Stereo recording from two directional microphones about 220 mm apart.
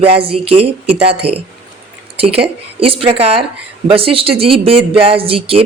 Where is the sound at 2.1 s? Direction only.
25° right (ahead or behind).